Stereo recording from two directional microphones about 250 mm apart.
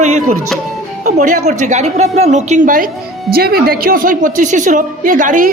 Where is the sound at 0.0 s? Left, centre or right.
Right.